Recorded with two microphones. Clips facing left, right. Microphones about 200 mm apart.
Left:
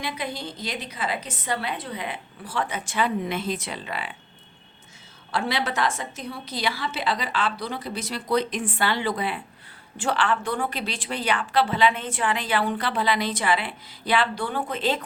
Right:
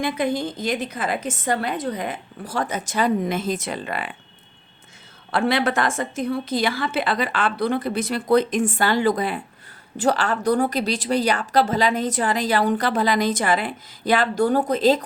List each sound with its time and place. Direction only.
0.0 s a woman's voice: 50° right (ahead or behind)
5.3 s a woman's voice: 55° right (ahead or behind); by 15.0 s 40° right (ahead or behind)